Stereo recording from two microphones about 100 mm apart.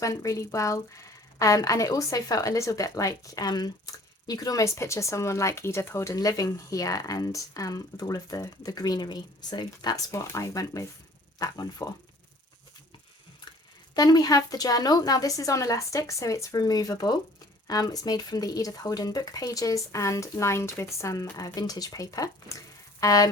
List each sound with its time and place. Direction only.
0.0 s a woman's voice: 35° left (ahead or behind)
10.1 s a woman's voice: 30° left (ahead or behind)
13.9 s a woman's voice: 40° left (ahead or behind)